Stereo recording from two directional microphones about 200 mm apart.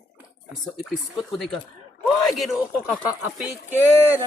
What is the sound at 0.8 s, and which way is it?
Speech, centre (ahead or behind).